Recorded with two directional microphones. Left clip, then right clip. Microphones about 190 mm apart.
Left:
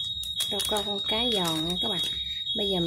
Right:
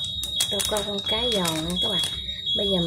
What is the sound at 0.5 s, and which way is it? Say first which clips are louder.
Speech: right 2 dB; 25° left (ahead or behind).